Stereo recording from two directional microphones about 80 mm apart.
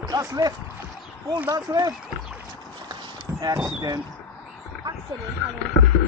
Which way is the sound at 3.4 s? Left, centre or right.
Right.